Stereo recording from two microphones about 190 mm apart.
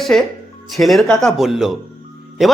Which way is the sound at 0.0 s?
Centre (ahead or behind).